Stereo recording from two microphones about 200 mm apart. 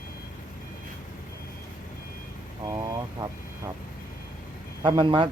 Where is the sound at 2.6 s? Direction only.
15° right (ahead or behind).